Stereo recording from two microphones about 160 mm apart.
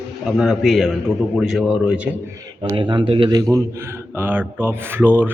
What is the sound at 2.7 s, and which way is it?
Speech, 30° right (ahead or behind).